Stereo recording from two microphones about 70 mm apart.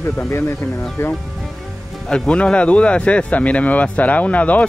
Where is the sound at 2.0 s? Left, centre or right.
Centre.